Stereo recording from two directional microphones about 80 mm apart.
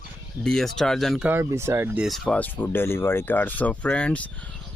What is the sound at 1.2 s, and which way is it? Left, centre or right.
Speech, right.